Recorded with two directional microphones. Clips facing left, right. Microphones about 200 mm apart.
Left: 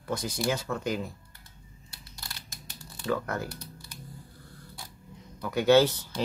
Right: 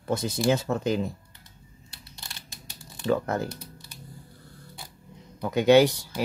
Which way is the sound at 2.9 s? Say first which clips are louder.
Right 5 dB; 25° right (ahead or behind).